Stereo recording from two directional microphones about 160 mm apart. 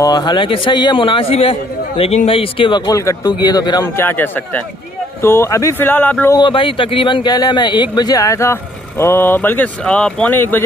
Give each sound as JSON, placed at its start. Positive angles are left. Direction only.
{"t": 0.0, "sound": "a man's voice", "side_deg": 25}
{"t": 3.8, "sound": "speech", "side_deg": 15}
{"t": 6.3, "sound": "speech", "side_deg": 30}